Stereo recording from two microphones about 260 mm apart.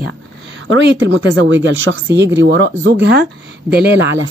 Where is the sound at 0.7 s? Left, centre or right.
Right.